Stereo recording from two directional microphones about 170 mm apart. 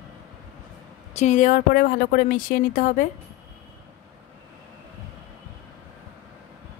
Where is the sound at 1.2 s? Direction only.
45° left (ahead or behind).